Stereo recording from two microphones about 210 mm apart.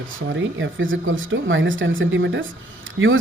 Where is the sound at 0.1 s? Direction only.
65° right (ahead or behind).